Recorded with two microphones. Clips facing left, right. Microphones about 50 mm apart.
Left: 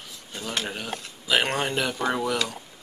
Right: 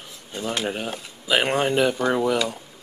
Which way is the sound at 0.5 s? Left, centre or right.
Centre.